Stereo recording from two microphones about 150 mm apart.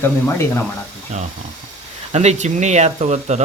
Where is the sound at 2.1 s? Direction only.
50° right (ahead or behind).